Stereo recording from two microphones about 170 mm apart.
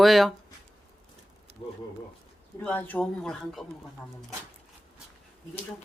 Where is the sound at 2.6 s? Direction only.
10° left (ahead or behind).